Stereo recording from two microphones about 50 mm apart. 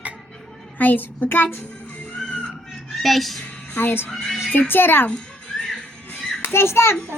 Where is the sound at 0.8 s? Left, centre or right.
Left.